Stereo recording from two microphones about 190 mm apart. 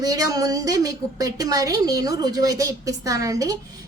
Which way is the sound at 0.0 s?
20° right (ahead or behind).